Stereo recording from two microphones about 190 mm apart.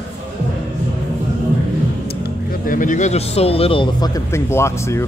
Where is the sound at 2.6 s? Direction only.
45° left (ahead or behind); by 5.0 s 15° left (ahead or behind).